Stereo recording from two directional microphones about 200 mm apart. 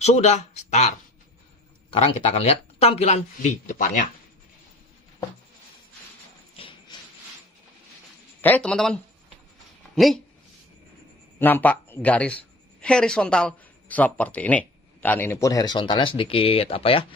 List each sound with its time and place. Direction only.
0.0 s speech: 35° left (ahead or behind)
1.9 s speech: 30° left (ahead or behind)
6.5 s a sound: 25° left (ahead or behind)
8.4 s speech: 10° left (ahead or behind)
11.3 s speech: 10° left (ahead or behind); by 17.1 s 25° left (ahead or behind)